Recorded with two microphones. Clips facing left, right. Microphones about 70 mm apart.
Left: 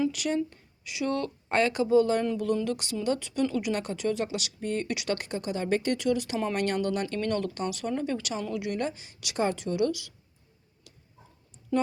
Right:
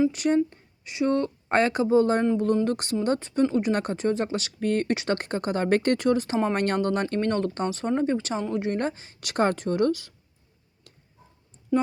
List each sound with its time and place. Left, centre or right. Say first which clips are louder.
0.1 s speech: right 6 dB; right
4.6 s speech: right 6 dB; right
4.9 s speech: right 5 dB; right
10.9 s a sound: right 1 dB; right
11.7 s speech: right 3 dB; centre